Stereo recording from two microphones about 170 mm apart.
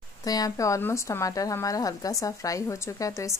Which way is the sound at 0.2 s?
20° left (ahead or behind).